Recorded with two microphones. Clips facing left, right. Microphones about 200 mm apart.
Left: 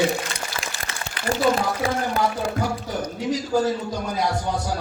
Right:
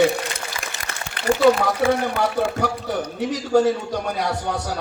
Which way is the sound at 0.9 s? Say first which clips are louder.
Right 1 dB; 55° right (ahead or behind).